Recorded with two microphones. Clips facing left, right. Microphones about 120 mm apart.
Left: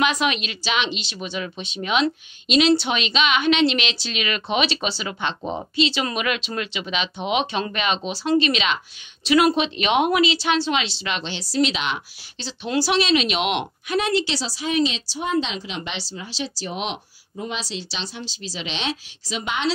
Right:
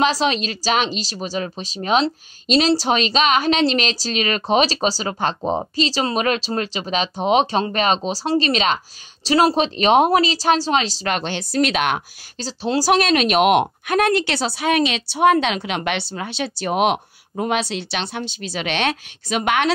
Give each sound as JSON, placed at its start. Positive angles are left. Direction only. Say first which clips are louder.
{"t": 0.0, "sound": "a woman's voice", "louder": "right 3 dB", "side_deg": -30}